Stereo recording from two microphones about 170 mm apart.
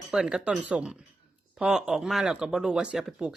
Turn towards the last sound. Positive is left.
turn(degrees=-5)  # may be behind; listen again after turning